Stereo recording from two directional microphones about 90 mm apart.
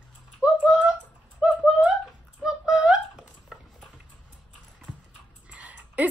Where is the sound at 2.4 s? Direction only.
5° right (ahead or behind).